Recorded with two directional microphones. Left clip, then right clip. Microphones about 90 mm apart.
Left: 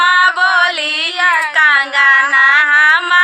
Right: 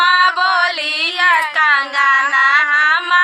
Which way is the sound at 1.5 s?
25° left (ahead or behind).